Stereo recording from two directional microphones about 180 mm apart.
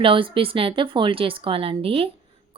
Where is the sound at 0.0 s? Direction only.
30° right (ahead or behind).